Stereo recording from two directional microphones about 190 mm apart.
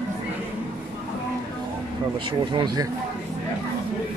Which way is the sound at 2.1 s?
25° right (ahead or behind).